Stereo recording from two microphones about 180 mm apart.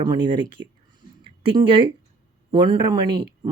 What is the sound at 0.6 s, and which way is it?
Speech, 90° right.